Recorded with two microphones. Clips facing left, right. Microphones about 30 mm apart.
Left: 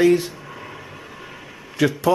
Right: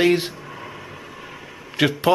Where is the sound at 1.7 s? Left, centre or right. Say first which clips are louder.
Even; right.